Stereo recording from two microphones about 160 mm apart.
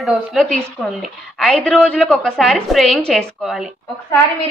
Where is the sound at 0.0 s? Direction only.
Centre (ahead or behind).